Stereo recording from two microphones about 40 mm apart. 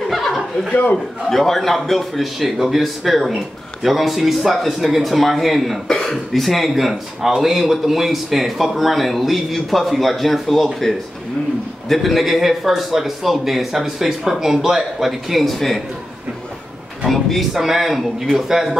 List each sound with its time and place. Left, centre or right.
0.1 s a sound: centre
0.9 s speech: centre
5.9 s a man's voice: centre
17.0 s a man's voice: centre